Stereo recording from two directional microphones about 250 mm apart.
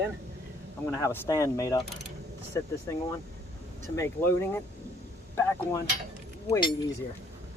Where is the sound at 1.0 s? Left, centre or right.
Centre.